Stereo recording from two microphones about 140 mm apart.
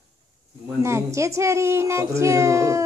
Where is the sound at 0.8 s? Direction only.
20° right (ahead or behind).